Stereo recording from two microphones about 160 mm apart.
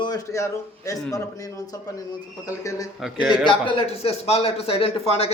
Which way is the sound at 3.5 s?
35° left (ahead or behind).